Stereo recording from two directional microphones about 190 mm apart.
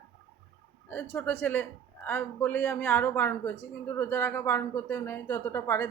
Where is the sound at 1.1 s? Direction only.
10° left (ahead or behind).